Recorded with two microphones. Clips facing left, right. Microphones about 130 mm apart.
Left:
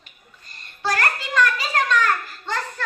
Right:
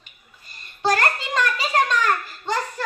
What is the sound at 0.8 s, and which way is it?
A child's voice, 20° right (ahead or behind).